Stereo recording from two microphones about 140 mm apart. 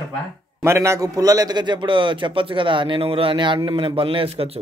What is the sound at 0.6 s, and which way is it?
A man's voice, 20° right (ahead or behind).